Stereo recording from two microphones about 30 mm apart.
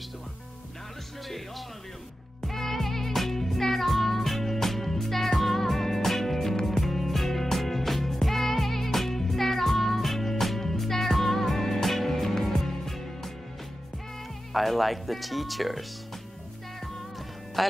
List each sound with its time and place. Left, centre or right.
2.4 s music: centre
14.5 s speech: centre
17.6 s speech: centre